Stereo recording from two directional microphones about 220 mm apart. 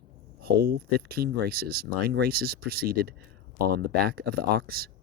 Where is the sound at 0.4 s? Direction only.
45° right (ahead or behind).